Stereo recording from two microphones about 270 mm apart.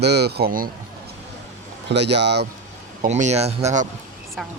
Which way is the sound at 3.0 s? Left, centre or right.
Right.